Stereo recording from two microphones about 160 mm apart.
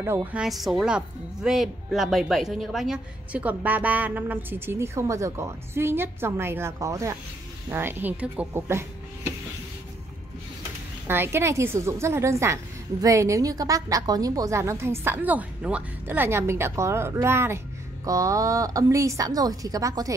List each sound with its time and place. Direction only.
0.0 s a woman's voice: 15° right (ahead or behind)
0.4 s a woman's voice: centre (ahead or behind)
11.1 s a woman's voice: 15° right (ahead or behind)